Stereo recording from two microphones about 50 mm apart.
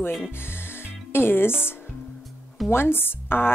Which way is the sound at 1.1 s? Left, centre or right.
Left.